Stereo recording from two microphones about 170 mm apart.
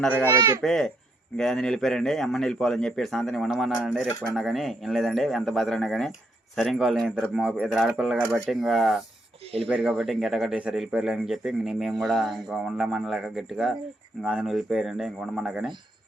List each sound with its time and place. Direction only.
0.0 s speech: 10° left (ahead or behind)